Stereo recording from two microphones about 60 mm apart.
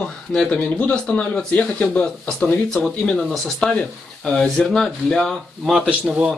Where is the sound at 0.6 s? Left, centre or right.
Left.